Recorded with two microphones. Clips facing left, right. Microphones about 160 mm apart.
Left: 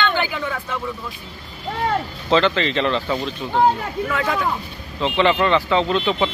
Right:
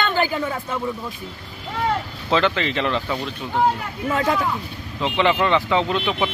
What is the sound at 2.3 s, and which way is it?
Speech, 10° right (ahead or behind).